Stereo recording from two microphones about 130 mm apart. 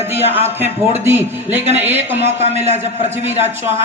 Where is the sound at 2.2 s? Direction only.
55° right (ahead or behind).